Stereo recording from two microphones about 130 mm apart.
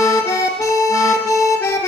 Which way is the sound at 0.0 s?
25° left (ahead or behind).